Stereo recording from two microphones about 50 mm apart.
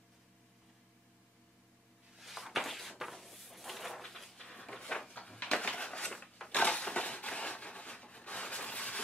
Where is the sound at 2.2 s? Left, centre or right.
Centre.